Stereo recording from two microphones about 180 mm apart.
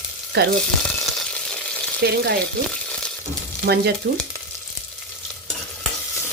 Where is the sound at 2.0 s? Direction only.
65° right (ahead or behind).